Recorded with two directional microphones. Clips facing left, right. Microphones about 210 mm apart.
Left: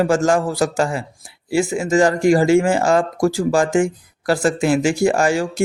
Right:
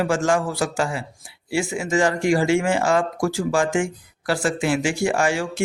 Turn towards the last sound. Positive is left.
turn(degrees=40)  # may be behind; listen again after turning